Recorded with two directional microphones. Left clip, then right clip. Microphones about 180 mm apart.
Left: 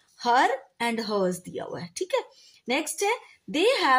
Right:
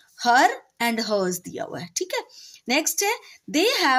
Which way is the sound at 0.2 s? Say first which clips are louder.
Right 4 dB; 35° right (ahead or behind).